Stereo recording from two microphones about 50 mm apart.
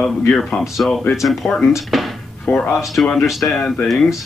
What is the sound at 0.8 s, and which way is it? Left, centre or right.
Speech, left.